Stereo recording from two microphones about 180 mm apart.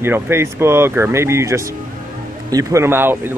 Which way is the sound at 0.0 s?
15° right (ahead or behind).